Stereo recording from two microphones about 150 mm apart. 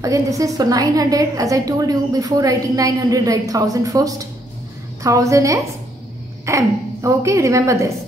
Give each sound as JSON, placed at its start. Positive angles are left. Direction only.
{"t": 0.0, "sound": "a woman's voice", "side_deg": -20}